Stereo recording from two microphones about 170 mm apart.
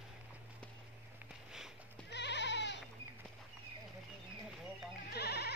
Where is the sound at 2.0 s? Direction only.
90° left.